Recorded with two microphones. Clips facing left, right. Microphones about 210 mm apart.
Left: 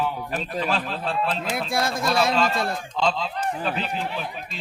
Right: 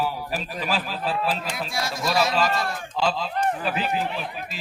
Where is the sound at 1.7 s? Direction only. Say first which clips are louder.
Left 5 dB; 55° left (ahead or behind).